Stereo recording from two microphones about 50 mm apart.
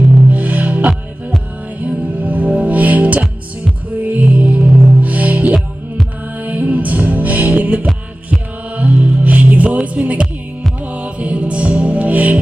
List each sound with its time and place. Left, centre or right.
0.3 s music: right